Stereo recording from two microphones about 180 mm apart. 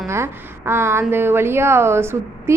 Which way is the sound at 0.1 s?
15° right (ahead or behind).